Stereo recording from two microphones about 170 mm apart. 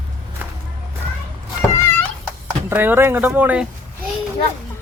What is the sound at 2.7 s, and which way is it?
Speech, 10° right (ahead or behind).